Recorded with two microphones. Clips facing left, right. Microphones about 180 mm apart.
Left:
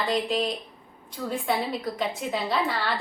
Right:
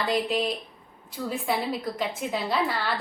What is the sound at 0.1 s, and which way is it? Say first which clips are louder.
A woman's voice: right 1 dB; 5° right (ahead or behind).